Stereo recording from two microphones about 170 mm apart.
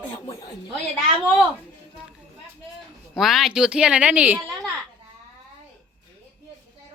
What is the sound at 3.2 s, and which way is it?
Speech, centre (ahead or behind).